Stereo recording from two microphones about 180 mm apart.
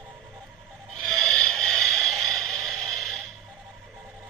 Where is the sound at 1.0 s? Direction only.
5° left (ahead or behind).